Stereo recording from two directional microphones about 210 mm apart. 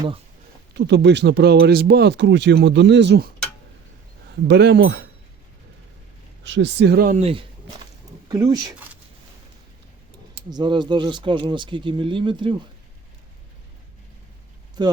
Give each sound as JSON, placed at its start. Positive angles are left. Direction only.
{"t": 0.7, "sound": "speech", "side_deg": -55}
{"t": 4.4, "sound": "speech", "side_deg": -55}
{"t": 6.4, "sound": "speech", "side_deg": -55}
{"t": 7.2, "sound": "speech", "side_deg": -30}
{"t": 10.5, "sound": "speech", "side_deg": -20}
{"t": 14.8, "sound": "speech", "side_deg": -20}